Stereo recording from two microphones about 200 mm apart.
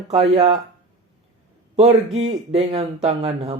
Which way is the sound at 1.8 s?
30° right (ahead or behind).